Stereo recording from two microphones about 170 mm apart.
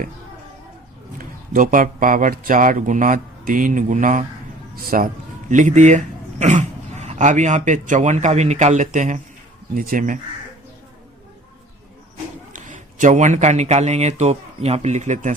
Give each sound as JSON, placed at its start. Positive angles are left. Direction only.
{"t": 1.2, "sound": "speech", "side_deg": -55}
{"t": 12.5, "sound": "speech", "side_deg": -50}